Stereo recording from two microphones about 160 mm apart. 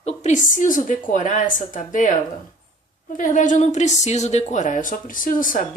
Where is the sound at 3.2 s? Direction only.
55° left (ahead or behind).